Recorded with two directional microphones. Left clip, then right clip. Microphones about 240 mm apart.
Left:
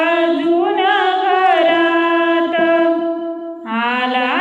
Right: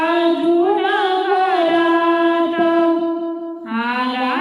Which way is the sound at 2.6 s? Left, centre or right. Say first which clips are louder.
Left 3 dB; right.